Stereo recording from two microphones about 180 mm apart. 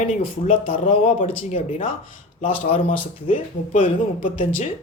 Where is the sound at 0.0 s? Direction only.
40° left (ahead or behind).